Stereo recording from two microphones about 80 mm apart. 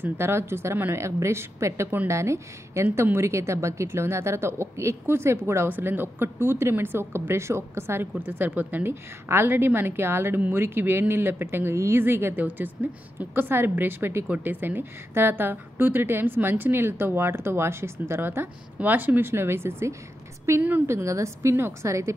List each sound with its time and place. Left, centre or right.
0.0 s a woman's voice: right